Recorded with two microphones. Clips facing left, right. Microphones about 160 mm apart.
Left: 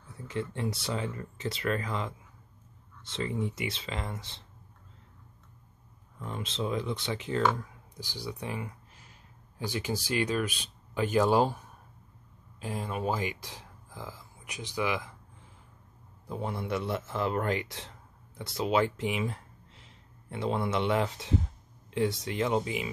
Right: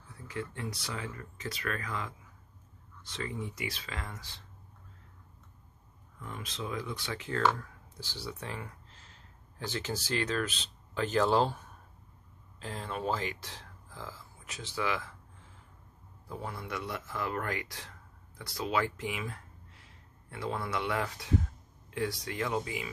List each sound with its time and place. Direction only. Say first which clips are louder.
0.3 s speech: left 5 dB; 25° left (ahead or behind)
6.1 s speech: left 6 dB; 25° left (ahead or behind)
16.3 s speech: left 6 dB; 25° left (ahead or behind)